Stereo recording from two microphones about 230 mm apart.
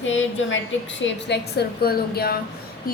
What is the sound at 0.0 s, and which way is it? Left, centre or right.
A woman's voice, left.